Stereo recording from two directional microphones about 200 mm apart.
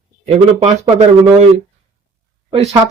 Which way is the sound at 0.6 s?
35° right (ahead or behind).